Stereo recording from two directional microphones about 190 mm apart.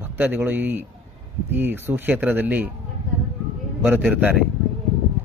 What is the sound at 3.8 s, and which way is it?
Speech, 5° right (ahead or behind).